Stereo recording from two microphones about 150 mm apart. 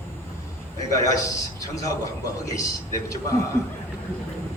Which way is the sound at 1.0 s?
20° left (ahead or behind).